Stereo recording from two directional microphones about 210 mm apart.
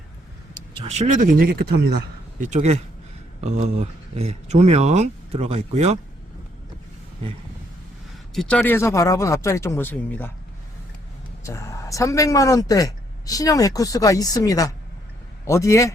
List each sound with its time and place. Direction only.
0.8 s speech: 30° right (ahead or behind)
1.8 s a man's voice: 45° right (ahead or behind)
2.5 s speech: 30° right (ahead or behind)
8.3 s speech: 5° left (ahead or behind)
11.4 s speech: 15° left (ahead or behind)